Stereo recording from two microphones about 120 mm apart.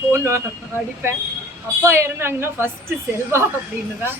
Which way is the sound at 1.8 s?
20° right (ahead or behind).